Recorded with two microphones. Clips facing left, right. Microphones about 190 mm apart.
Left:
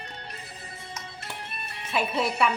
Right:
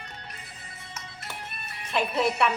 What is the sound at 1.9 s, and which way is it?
Speech, centre (ahead or behind).